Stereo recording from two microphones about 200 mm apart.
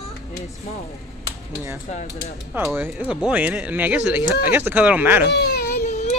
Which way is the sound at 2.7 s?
5° right (ahead or behind).